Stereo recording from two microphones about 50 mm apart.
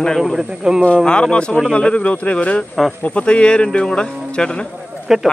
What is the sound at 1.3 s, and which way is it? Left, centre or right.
A man's voice, left.